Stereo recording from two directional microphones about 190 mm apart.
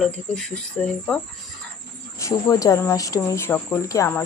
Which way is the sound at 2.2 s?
15° left (ahead or behind).